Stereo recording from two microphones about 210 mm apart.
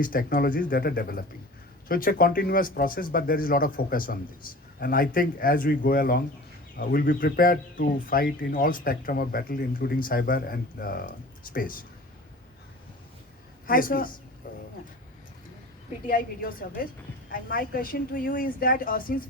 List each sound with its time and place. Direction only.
0.0 s speech: 40° left (ahead or behind)
13.7 s speech: 40° left (ahead or behind)
14.4 s vehicle: 40° left (ahead or behind)
16.0 s speech: 45° left (ahead or behind)